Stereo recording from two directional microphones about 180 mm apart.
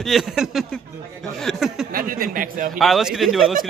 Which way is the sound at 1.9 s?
55° right (ahead or behind).